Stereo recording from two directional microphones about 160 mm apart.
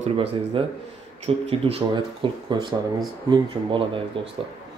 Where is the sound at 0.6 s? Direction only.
35° right (ahead or behind).